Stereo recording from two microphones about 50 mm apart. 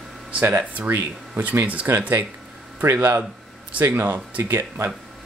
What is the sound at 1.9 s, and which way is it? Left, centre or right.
Speech, right.